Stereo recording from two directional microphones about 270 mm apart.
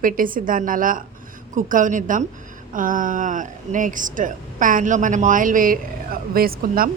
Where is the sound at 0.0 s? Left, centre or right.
Right.